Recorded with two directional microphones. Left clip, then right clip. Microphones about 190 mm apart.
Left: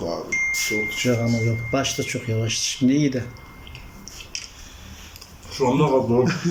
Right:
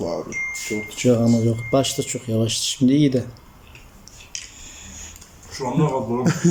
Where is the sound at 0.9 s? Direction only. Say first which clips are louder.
Right 4 dB; 20° right (ahead or behind).